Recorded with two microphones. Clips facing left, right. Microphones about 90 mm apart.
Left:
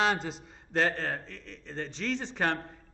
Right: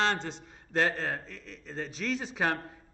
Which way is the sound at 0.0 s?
5° left (ahead or behind).